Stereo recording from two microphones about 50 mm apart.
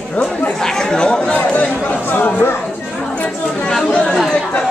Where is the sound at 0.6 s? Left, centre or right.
Centre; by 2.3 s left.